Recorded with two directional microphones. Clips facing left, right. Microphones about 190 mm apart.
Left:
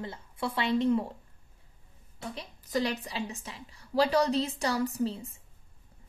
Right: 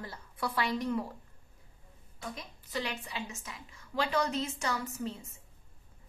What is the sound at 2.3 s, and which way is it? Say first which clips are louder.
A woman's voice: left 8 dB; 40° left (ahead or behind).